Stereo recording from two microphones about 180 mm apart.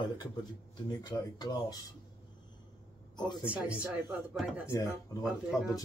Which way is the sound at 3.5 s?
5° right (ahead or behind).